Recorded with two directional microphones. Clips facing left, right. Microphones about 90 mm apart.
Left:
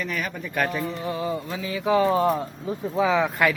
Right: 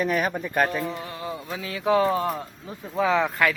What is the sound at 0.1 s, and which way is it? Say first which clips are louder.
Speech: right 5 dB; 45° right (ahead or behind).